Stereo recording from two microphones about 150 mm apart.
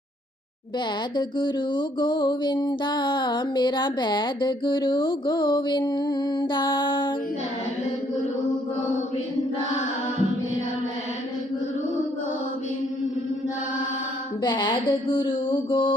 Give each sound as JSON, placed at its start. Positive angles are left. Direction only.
{"t": 1.1, "sound": "music", "side_deg": 30}
{"t": 14.4, "sound": "music", "side_deg": 30}